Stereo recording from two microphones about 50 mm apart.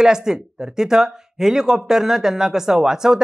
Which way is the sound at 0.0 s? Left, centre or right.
Centre.